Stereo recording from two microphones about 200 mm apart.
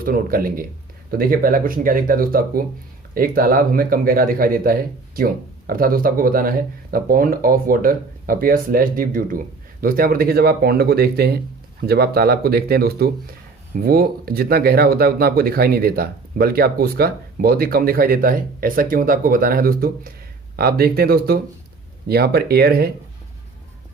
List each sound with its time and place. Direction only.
0.0 s speech: 45° right (ahead or behind)